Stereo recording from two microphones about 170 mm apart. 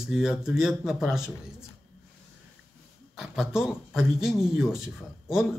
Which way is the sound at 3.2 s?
5° right (ahead or behind).